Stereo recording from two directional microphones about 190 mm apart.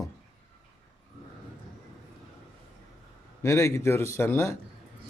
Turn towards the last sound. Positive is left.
turn(degrees=15)  # may be behind; listen again after turning